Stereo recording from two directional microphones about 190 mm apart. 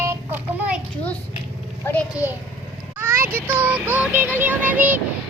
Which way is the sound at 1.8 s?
10° left (ahead or behind).